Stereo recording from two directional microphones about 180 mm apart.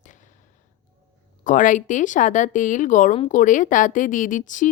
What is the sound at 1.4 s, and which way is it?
A woman's voice, 45° left (ahead or behind).